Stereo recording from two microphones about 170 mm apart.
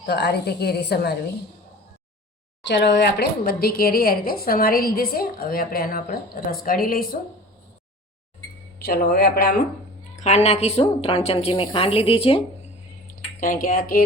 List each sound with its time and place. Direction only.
0.0 s a woman's voice: 75° left (ahead or behind)
2.6 s a woman's voice: 90° left; by 7.2 s 60° left (ahead or behind)
8.8 s a woman's voice: 65° left (ahead or behind)
10.2 s a woman's voice: 40° left (ahead or behind)
13.1 s speech: 55° left (ahead or behind)